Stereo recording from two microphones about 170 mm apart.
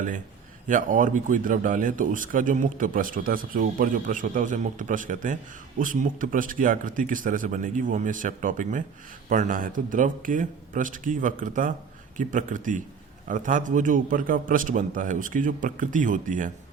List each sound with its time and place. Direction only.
0.7 s a man's voice: 50° right (ahead or behind)